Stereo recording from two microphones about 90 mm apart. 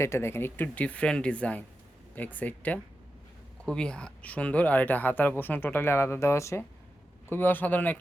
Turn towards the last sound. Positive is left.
turn(degrees=20)  # may be behind; listen again after turning